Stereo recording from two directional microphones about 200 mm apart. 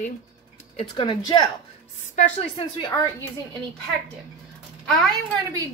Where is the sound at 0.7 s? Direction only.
25° left (ahead or behind).